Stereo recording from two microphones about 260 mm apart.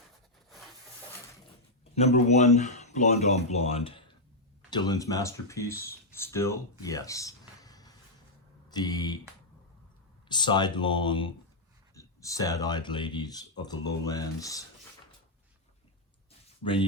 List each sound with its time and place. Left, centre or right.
1.8 s speech: left
10.2 s speech: centre